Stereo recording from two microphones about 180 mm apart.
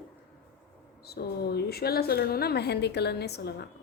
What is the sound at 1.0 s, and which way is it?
A woman's voice, 60° left (ahead or behind).